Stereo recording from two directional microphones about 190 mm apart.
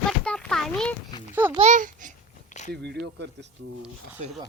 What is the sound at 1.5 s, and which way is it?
Speech, 35° right (ahead or behind).